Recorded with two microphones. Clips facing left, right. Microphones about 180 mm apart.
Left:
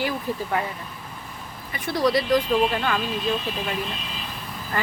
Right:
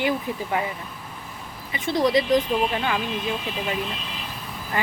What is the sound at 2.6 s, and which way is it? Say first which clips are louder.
Speech: left 1 dB; 5° right (ahead or behind).